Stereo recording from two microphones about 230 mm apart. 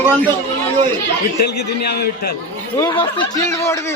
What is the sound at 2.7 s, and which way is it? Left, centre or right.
Speech, centre.